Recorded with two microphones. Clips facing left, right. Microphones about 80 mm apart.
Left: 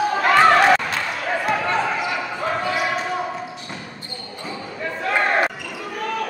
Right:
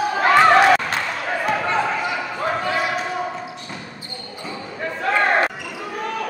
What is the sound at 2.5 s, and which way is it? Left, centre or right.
Basketball bounce, centre.